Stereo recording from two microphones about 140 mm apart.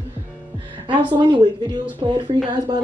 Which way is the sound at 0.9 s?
30° right (ahead or behind).